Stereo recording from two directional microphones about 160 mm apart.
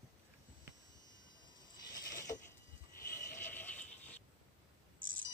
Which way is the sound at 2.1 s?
20° left (ahead or behind).